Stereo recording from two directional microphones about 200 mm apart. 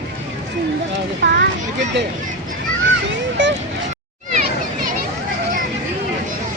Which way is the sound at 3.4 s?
65° right (ahead or behind).